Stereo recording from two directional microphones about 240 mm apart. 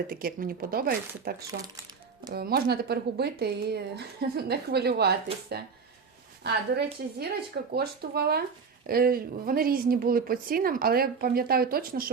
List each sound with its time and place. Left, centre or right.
0.1 s a woman's voice: right